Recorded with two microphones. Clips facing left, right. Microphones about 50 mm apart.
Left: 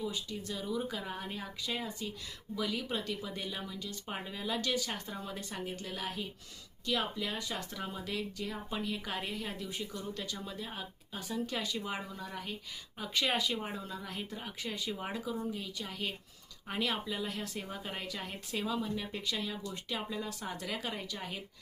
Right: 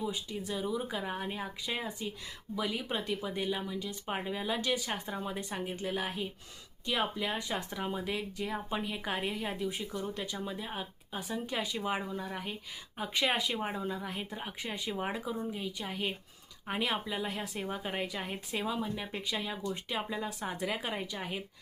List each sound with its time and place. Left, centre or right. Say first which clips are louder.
0.0 s speech: right 2 dB; centre